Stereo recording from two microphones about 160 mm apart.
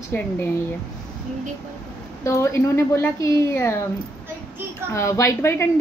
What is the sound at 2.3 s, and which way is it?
A woman's voice, 20° left (ahead or behind).